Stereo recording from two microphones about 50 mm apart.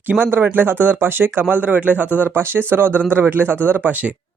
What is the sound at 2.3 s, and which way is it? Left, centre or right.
Speech, right.